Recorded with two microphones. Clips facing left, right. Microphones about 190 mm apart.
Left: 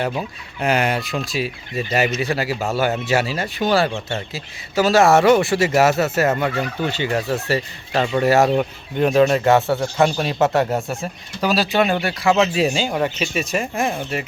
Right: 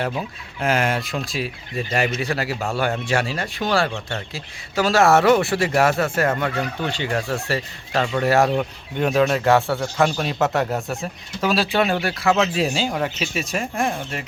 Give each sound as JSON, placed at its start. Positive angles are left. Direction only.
{"t": 0.0, "sound": "speech", "side_deg": 0}